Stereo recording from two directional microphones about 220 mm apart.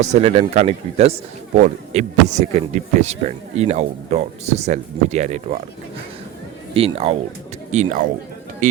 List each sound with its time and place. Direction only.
0.0 s a man's voice: 30° right (ahead or behind)
6.7 s a man's voice: 25° right (ahead or behind)